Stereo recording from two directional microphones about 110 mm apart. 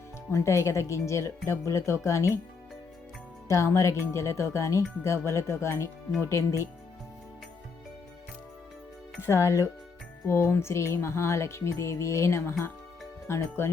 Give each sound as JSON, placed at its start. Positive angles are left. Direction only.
{"t": 0.3, "sound": "music", "side_deg": 25}
{"t": 3.5, "sound": "music", "side_deg": 25}
{"t": 9.2, "sound": "music", "side_deg": 25}